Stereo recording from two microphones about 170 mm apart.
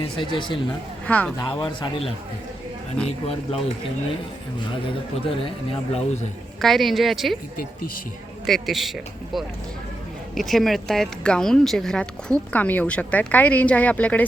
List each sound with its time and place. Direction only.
0.0 s a man's voice: 30° left (ahead or behind)
1.0 s speech: 10° left (ahead or behind)
1.4 s a man's voice: 30° left (ahead or behind)
5.1 s speech: 35° left (ahead or behind)
6.6 s a man's voice: centre (ahead or behind)
8.4 s a man's voice: centre (ahead or behind)